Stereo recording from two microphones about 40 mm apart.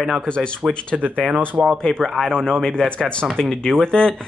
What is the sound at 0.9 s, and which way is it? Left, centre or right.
Speech, centre.